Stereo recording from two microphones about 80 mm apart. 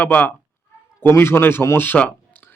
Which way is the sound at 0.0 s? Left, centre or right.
Left.